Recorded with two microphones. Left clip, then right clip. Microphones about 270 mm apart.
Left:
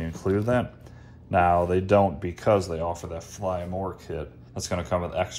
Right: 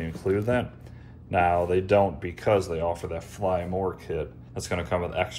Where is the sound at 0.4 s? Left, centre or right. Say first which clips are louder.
Left 1 dB; centre.